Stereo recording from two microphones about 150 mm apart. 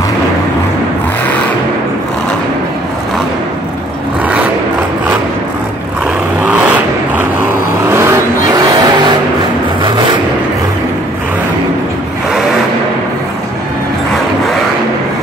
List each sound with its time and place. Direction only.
7.9 s vehicle: 20° right (ahead or behind)